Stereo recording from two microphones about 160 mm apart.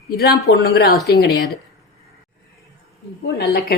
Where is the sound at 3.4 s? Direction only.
80° left.